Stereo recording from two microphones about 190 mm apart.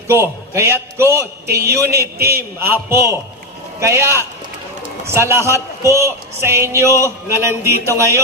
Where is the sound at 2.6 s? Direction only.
15° right (ahead or behind).